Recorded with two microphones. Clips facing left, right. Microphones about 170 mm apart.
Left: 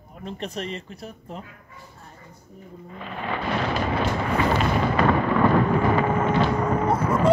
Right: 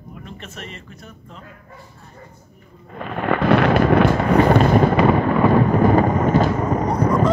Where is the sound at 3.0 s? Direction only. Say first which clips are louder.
Right 9 dB; 60° right (ahead or behind).